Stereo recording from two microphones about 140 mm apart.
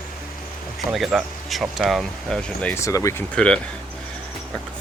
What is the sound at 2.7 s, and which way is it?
Speech, 20° left (ahead or behind).